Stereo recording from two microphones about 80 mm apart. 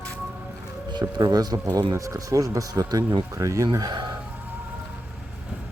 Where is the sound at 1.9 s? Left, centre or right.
Right.